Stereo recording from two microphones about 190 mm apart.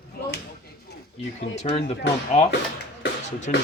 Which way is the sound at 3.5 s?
45° left (ahead or behind).